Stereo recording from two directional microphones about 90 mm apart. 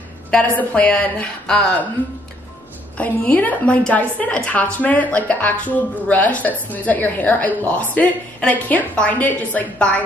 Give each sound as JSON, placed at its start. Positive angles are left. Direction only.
{"t": 0.3, "sound": "a woman's voice", "side_deg": 15}
{"t": 3.0, "sound": "a woman's voice", "side_deg": 15}